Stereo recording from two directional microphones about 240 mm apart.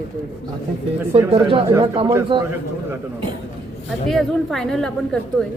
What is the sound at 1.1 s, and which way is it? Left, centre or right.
A man's voice, right.